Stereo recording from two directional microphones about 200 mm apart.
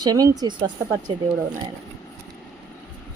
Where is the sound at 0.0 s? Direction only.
20° right (ahead or behind).